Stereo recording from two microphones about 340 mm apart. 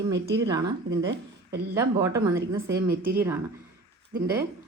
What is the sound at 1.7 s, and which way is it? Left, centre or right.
Speech, centre.